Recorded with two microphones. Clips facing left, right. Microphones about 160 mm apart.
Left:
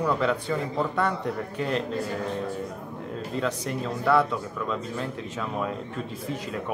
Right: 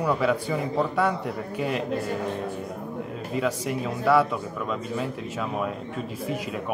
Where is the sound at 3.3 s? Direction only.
10° right (ahead or behind).